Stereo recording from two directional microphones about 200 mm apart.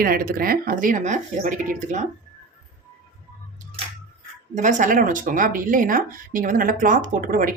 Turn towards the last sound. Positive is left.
turn(degrees=-45)  # may be behind; listen again after turning